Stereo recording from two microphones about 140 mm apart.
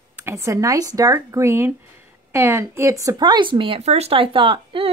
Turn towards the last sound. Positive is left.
turn(degrees=-40)  # may be behind; listen again after turning